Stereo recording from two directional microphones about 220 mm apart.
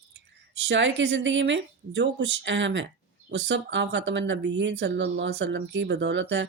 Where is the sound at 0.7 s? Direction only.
55° right (ahead or behind).